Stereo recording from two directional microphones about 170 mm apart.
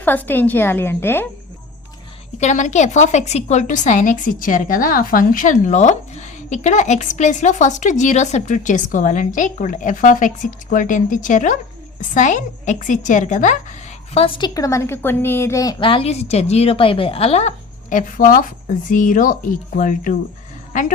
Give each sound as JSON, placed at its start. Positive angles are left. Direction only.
{"t": 0.0, "sound": "a woman's voice", "side_deg": 10}
{"t": 2.4, "sound": "a woman's voice", "side_deg": 45}
{"t": 14.1, "sound": "a woman's voice", "side_deg": 35}
{"t": 15.8, "sound": "a woman's voice", "side_deg": 30}